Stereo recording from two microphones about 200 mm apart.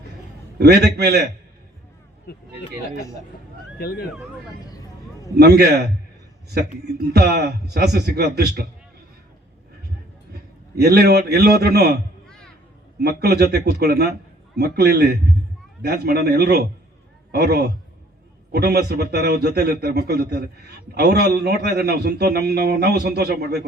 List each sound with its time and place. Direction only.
0.6 s a man's voice: 55° right (ahead or behind)
2.3 s speech: 50° left (ahead or behind)
3.8 s speech: 50° left (ahead or behind)
5.4 s a man's voice: 55° right (ahead or behind)
7.1 s a man's voice: 55° right (ahead or behind)
10.8 s a man's voice: 55° right (ahead or behind)
13.0 s a man's voice: 55° right (ahead or behind)